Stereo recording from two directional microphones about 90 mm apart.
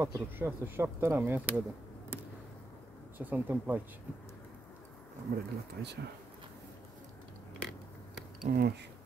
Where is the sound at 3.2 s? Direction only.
20° right (ahead or behind).